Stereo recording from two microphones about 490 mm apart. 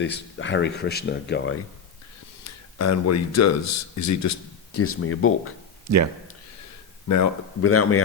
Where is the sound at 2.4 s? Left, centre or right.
Left.